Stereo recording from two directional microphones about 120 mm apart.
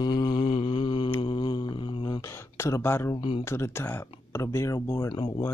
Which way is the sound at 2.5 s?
25° left (ahead or behind).